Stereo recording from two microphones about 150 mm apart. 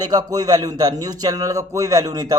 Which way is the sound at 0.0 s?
25° right (ahead or behind).